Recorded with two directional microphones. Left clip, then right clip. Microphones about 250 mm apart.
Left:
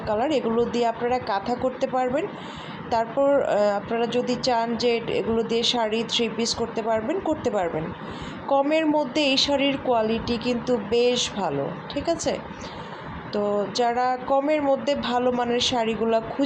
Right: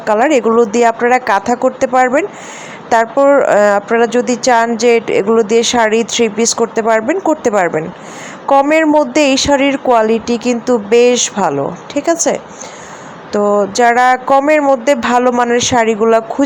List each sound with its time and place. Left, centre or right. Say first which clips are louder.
0.0 s speech: right 13 dB; right